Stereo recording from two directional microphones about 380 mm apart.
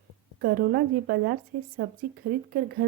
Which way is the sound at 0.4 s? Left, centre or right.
Right.